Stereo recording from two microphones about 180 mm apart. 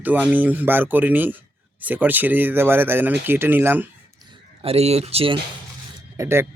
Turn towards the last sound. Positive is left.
turn(degrees=-15)  # may be behind; listen again after turning